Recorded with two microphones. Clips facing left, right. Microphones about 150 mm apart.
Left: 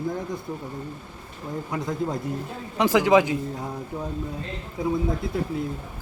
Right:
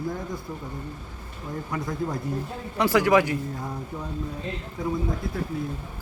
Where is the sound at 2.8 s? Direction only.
20° left (ahead or behind).